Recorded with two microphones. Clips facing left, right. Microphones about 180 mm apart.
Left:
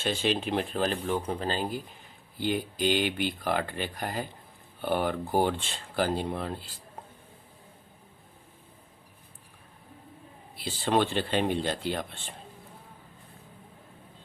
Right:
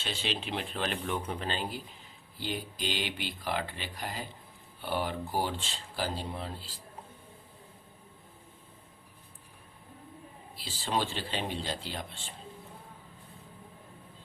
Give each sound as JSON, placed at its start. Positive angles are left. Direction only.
{"t": 0.0, "sound": "speech", "side_deg": 50}
{"t": 2.4, "sound": "speech", "side_deg": 50}
{"t": 10.5, "sound": "speech", "side_deg": 55}